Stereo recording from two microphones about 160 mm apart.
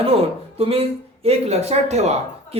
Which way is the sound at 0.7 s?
40° right (ahead or behind).